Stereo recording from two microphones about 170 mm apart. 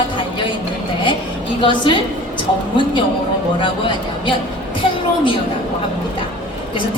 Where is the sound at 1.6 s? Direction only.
30° left (ahead or behind).